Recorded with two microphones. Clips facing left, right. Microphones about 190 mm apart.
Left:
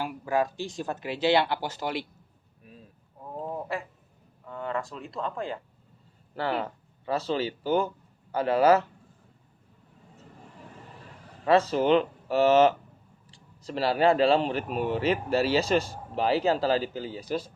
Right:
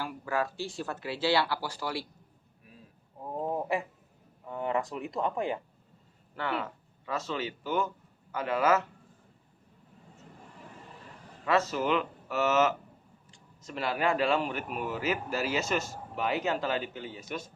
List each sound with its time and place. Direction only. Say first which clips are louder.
0.0 s speech: left 5 dB; 15° left (ahead or behind)
2.6 s a sound: left 5 dB; 25° left (ahead or behind)
3.2 s speech: right 2 dB; 20° right (ahead or behind)
6.3 s speech: left 4 dB; 35° left (ahead or behind)
11.4 s speech: left 6 dB; 30° left (ahead or behind)